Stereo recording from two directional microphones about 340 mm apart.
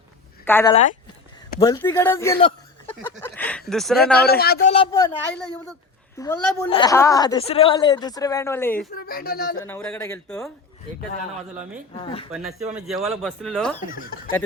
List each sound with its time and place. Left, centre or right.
0.4 s a woman's voice: centre
1.6 s a woman's voice: centre
4.2 s a woman's voice: left; by 8.9 s centre
9.0 s speech: left
9.6 s speech: centre
11.9 s a woman's voice: centre
12.3 s speech: centre